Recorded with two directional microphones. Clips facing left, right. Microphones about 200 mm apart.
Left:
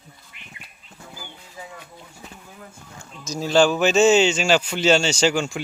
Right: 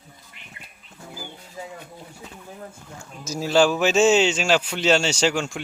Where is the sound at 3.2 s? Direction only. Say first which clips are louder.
Left 1 dB; 5° right (ahead or behind).